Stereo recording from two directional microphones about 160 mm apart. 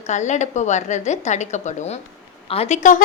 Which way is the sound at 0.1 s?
45° left (ahead or behind).